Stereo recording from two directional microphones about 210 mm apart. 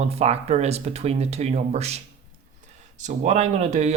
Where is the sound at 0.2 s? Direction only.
30° right (ahead or behind).